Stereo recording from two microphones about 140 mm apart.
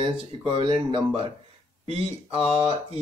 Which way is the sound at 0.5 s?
40° right (ahead or behind).